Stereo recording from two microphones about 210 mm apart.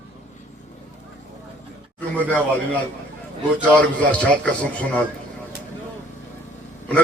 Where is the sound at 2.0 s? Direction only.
5° left (ahead or behind).